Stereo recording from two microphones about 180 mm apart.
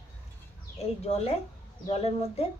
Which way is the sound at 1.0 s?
35° left (ahead or behind).